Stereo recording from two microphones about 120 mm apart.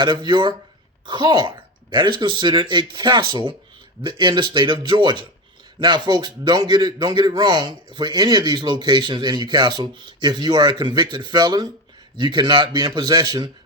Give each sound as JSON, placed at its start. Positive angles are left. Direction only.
{"t": 0.0, "sound": "speech", "side_deg": -40}